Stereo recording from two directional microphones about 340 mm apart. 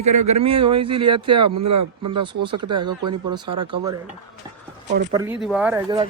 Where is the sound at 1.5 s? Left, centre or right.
Right.